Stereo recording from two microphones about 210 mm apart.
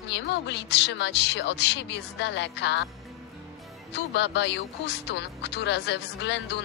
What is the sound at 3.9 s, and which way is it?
A woman's voice, 55° left (ahead or behind).